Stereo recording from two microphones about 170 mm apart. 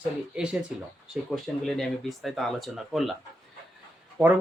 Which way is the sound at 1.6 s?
Centre (ahead or behind).